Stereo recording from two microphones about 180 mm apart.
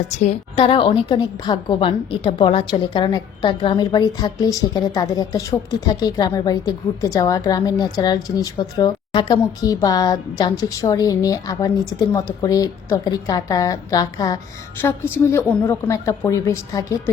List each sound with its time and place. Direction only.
0.1 s a woman's voice: 40° left (ahead or behind); by 17.0 s 15° left (ahead or behind)